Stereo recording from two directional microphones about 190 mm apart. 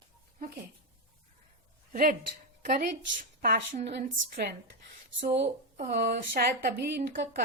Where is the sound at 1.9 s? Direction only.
50° right (ahead or behind).